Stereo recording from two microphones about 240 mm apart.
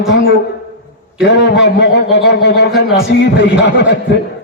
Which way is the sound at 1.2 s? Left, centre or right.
Left.